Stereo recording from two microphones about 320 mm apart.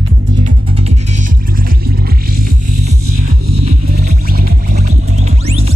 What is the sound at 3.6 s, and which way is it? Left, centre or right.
Music, right.